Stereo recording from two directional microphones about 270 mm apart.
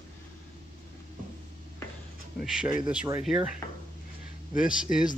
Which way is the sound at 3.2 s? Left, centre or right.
Centre.